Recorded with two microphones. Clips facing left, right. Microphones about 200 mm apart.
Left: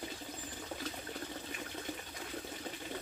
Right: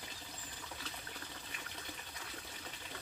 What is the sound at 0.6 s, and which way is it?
Water, 45° left (ahead or behind).